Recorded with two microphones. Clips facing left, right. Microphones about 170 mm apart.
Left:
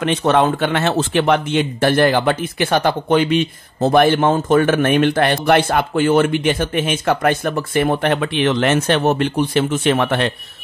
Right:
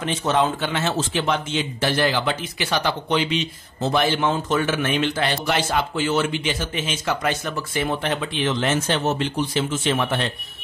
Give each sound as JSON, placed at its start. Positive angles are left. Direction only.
{"t": 0.0, "sound": "speech", "side_deg": 65}